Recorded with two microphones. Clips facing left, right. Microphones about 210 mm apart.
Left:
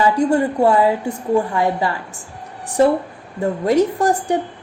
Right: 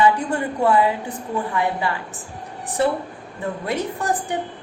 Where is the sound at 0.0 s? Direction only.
40° left (ahead or behind).